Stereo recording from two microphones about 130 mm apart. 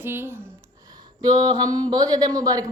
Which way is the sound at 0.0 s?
20° right (ahead or behind).